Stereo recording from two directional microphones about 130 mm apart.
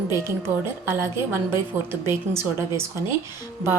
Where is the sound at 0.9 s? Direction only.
20° right (ahead or behind).